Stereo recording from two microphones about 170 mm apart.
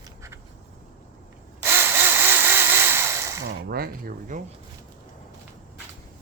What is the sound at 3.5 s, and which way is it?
Speech, 65° right (ahead or behind).